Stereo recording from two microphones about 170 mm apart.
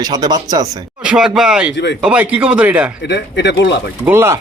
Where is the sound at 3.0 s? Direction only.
90° left.